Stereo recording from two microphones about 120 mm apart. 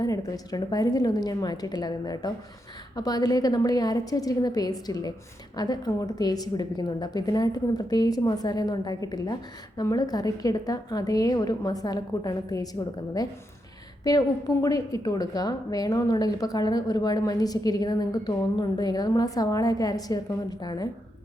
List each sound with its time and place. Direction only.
0.0 s a woman's voice: 30° left (ahead or behind)
14.0 s a woman's voice: 30° left (ahead or behind)